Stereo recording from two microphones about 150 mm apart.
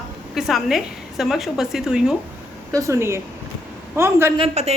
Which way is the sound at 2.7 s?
20° right (ahead or behind).